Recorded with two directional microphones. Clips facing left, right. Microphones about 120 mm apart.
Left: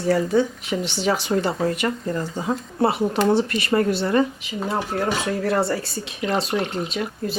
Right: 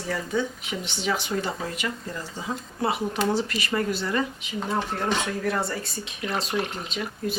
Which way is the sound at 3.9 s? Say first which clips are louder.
Left 7 dB; 55° left (ahead or behind).